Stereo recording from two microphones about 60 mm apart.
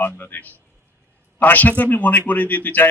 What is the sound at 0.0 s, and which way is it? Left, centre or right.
A man's voice, left.